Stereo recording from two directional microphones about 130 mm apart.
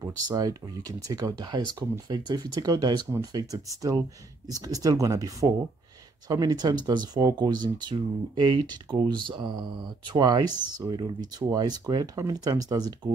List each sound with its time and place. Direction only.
0.3 s speech: 30° right (ahead or behind)